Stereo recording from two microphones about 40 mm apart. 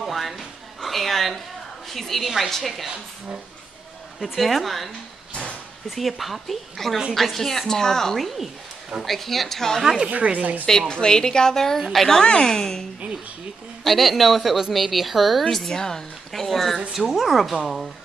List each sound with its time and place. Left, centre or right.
0.0 s a sound: centre
1.9 s a woman's voice: centre
4.2 s a woman's voice: centre
5.3 s a sound: left
5.9 s a woman's voice: centre
9.0 s a woman's voice: centre
9.8 s speech: centre
10.0 s speech: right
10.9 s a woman's voice: centre
13.8 s a woman's voice: centre
15.5 s a woman's voice: centre